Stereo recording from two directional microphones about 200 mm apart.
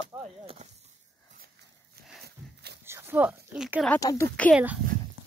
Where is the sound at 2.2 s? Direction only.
55° right (ahead or behind).